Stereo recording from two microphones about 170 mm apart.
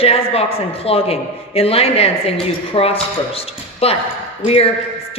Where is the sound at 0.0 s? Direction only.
35° left (ahead or behind).